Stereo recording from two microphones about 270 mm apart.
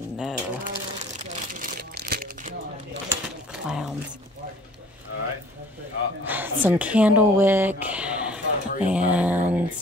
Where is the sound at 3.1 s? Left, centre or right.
Centre.